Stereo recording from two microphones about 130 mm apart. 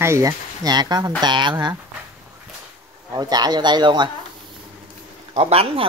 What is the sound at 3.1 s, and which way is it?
Speech, 30° right (ahead or behind).